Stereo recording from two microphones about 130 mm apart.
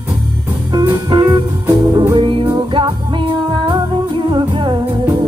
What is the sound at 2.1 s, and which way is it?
Music, 40° right (ahead or behind).